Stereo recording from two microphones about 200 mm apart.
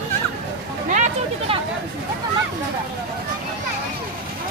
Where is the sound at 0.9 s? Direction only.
35° right (ahead or behind).